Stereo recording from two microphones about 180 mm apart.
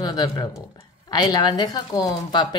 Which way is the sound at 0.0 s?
20° left (ahead or behind).